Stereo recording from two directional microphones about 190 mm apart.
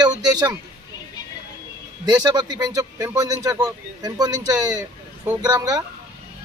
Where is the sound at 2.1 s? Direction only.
20° right (ahead or behind).